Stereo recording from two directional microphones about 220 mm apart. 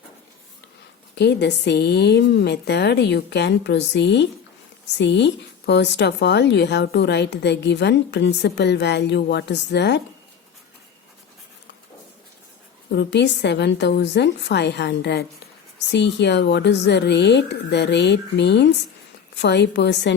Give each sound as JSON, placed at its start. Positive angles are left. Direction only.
{"t": 1.1, "sound": "speech", "side_deg": 50}
{"t": 12.9, "sound": "speech", "side_deg": 50}